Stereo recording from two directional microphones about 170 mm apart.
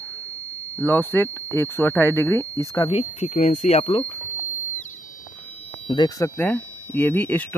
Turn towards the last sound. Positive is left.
turn(degrees=10)  # may be behind; listen again after turning